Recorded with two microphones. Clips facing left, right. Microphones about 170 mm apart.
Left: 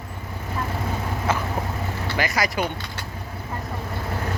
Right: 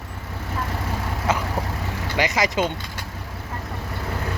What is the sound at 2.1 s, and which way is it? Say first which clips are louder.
Speech: right 3 dB; 20° right (ahead or behind).